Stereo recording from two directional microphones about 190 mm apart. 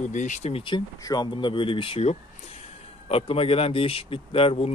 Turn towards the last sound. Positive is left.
turn(degrees=30)  # may be behind; listen again after turning